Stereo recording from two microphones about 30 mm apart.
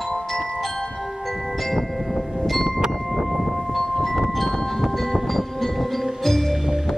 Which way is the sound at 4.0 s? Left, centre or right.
Centre.